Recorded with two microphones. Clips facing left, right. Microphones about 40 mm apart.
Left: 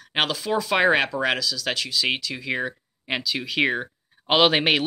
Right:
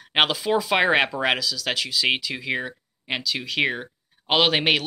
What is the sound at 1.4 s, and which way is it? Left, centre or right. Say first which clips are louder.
Speech: even; centre.